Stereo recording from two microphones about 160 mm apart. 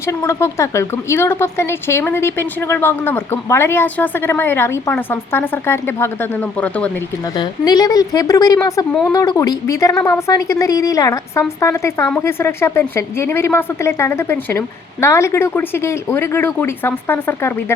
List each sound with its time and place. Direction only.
0.2 s speech: 15° left (ahead or behind)
7.3 s a woman's voice: 25° left (ahead or behind)
8.9 s speech: 5° left (ahead or behind)
9.1 s a woman's voice: 25° left (ahead or behind)